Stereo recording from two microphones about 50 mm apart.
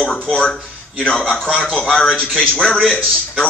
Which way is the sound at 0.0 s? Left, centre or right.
Centre.